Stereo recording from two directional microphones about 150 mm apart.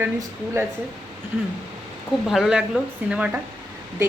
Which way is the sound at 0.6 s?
20° right (ahead or behind).